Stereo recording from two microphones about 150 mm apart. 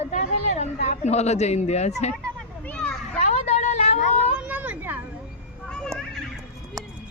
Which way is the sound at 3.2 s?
50° left (ahead or behind).